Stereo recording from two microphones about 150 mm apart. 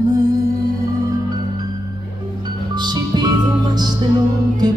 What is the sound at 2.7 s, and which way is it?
Music, 30° right (ahead or behind).